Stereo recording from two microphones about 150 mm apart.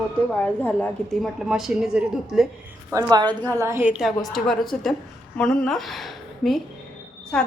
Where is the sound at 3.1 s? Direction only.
30° right (ahead or behind).